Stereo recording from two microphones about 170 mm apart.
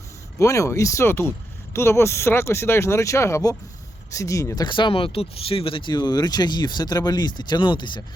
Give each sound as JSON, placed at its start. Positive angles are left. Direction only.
{"t": 0.3, "sound": "speech", "side_deg": 20}